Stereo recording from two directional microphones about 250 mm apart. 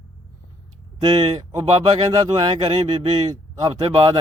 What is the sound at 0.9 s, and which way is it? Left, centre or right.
Speech, centre.